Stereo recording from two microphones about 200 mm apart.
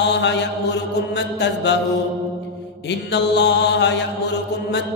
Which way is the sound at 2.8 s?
60° left (ahead or behind).